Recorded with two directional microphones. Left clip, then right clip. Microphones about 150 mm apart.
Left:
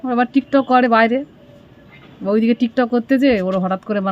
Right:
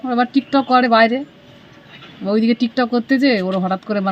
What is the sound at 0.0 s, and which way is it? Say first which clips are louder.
A woman's voice: even; 10° left (ahead or behind).